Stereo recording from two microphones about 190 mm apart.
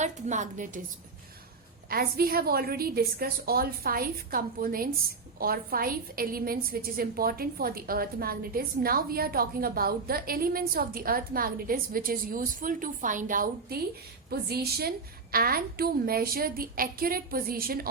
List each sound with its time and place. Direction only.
0.0 s a woman's voice: 40° right (ahead or behind)
1.9 s a woman's voice: 50° right (ahead or behind)